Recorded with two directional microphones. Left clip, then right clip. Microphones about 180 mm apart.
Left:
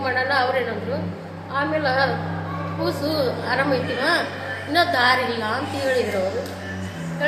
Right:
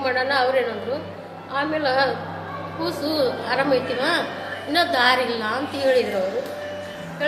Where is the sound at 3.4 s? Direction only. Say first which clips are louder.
Right 1 dB; 30° right (ahead or behind).